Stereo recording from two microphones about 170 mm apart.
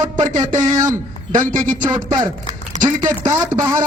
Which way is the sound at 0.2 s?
35° right (ahead or behind).